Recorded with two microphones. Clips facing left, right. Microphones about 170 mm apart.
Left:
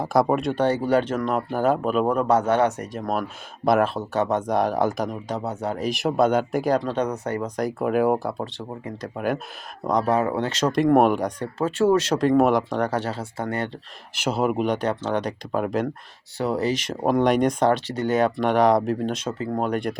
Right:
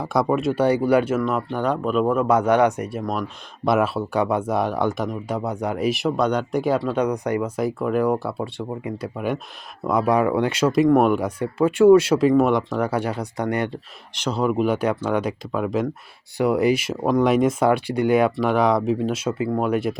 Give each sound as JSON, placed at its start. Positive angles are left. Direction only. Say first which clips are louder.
{"t": 0.0, "sound": "speech", "louder": "even", "side_deg": 0}
{"t": 2.1, "sound": "speech", "louder": "right 4 dB", "side_deg": -10}
{"t": 5.4, "sound": "speech", "louder": "right 2 dB", "side_deg": -15}
{"t": 5.8, "sound": "speech", "louder": "left 1 dB", "side_deg": 0}
{"t": 7.9, "sound": "speech", "louder": "left 1 dB", "side_deg": 5}
{"t": 8.2, "sound": "speech", "louder": "right 2 dB", "side_deg": -10}
{"t": 14.2, "sound": "speech", "louder": "right 1 dB", "side_deg": 5}
{"t": 16.4, "sound": "speech", "louder": "right 5 dB", "side_deg": -15}